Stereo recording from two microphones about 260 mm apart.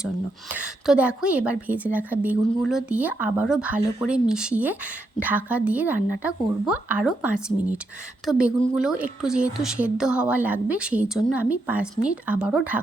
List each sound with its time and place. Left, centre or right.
0.5 s a woman's voice: centre